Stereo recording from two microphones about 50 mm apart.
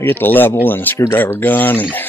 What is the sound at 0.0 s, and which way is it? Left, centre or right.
Speech, left.